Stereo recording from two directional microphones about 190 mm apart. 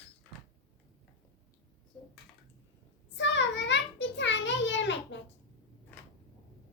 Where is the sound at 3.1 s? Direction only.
70° left (ahead or behind).